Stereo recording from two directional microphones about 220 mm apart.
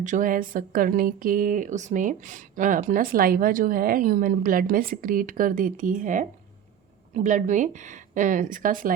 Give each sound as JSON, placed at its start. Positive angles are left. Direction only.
{"t": 0.0, "sound": "speech", "side_deg": -35}